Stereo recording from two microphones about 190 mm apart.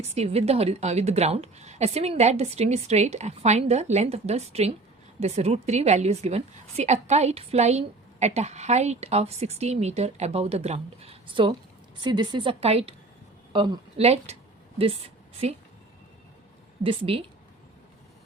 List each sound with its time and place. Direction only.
0.1 s a woman's voice: 35° right (ahead or behind)
16.8 s a woman's voice: 30° right (ahead or behind)